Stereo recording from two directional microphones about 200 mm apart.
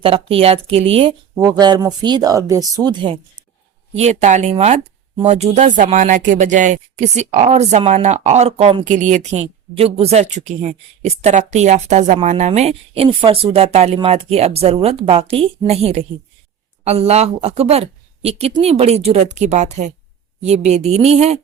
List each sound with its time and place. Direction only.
0.0 s speech: 30° right (ahead or behind)
3.9 s speech: 35° right (ahead or behind)